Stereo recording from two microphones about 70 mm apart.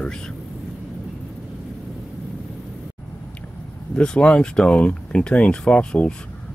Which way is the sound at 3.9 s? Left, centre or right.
Centre.